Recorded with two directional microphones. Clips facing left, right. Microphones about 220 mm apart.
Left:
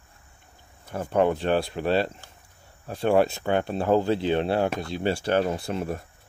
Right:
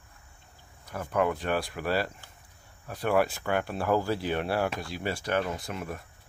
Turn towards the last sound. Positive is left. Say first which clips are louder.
# left 7 dB
turn(degrees=30)  # may be behind; listen again after turning